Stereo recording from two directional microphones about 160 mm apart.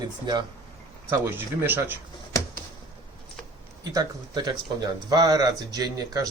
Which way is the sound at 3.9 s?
25° right (ahead or behind).